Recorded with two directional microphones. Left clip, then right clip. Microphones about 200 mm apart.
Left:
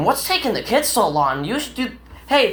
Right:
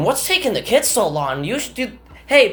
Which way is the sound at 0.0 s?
40° right (ahead or behind).